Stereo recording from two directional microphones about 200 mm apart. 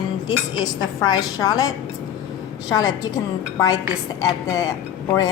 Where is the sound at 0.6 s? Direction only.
20° left (ahead or behind).